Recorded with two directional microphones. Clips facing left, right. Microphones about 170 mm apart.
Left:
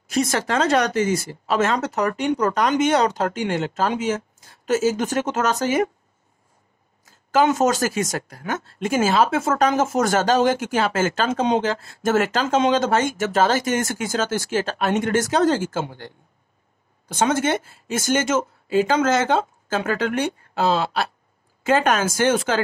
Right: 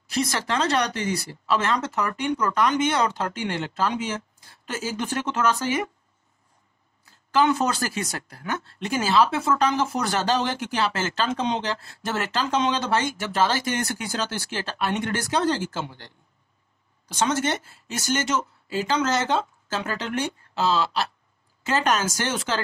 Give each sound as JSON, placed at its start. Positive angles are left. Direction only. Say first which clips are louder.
{"t": 0.1, "sound": "speech", "louder": "left 4 dB", "side_deg": 50}
{"t": 7.2, "sound": "speech", "louder": "left 4 dB", "side_deg": 45}